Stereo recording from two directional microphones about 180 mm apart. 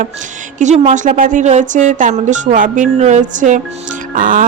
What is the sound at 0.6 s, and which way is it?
Speech, 40° right (ahead or behind).